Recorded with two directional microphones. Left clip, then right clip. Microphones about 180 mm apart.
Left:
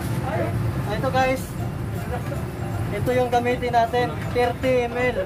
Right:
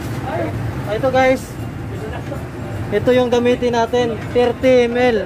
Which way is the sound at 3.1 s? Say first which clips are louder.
Right 6 dB; 25° right (ahead or behind).